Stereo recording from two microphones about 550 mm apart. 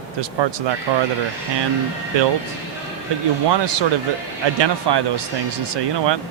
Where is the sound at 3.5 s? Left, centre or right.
Right.